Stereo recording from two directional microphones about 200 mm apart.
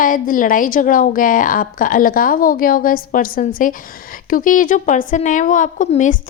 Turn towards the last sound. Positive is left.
turn(degrees=40)  # may be behind; listen again after turning